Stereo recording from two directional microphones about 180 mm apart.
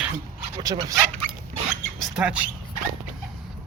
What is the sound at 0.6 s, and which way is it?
Speech, 20° right (ahead or behind).